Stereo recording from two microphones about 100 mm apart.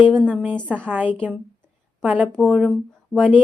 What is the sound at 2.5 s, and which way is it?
Speech, centre (ahead or behind).